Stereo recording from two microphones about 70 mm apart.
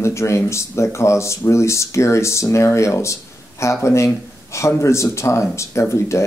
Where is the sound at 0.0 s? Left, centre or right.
Left.